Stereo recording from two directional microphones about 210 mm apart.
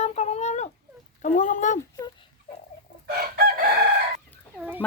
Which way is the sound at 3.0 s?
50° right (ahead or behind).